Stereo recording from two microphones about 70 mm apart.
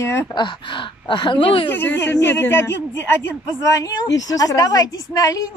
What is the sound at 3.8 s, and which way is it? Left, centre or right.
A woman's voice, left.